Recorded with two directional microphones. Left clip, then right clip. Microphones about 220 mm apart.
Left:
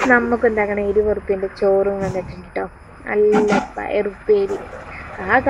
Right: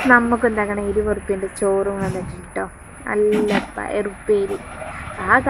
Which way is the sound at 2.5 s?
Centre (ahead or behind).